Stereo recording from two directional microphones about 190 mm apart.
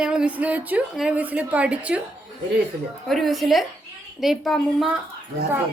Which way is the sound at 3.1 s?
Centre (ahead or behind).